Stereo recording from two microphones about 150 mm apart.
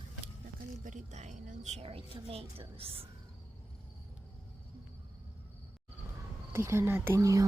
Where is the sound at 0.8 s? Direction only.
50° right (ahead or behind).